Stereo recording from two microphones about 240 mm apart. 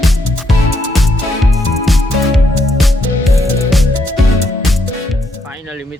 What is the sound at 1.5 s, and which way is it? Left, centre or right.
Music, centre.